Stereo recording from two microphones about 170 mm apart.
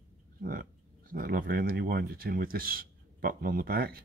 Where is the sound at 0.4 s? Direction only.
60° right (ahead or behind).